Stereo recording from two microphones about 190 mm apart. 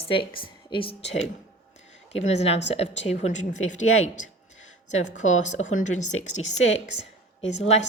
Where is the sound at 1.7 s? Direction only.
35° left (ahead or behind).